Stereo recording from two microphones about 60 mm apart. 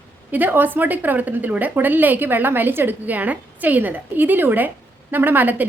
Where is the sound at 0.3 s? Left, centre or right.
Right.